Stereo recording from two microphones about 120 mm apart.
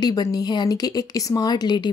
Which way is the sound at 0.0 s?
35° left (ahead or behind).